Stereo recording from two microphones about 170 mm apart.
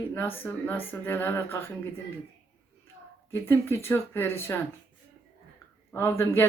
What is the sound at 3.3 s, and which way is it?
Speech, 15° left (ahead or behind).